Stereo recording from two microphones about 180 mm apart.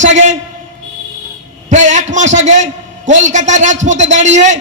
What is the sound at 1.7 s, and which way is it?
A man's voice, 40° right (ahead or behind).